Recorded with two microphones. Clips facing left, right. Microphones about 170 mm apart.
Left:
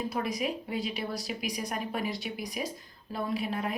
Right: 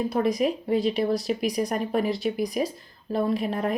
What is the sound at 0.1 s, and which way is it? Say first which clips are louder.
A woman's voice: right 8 dB; 40° right (ahead or behind).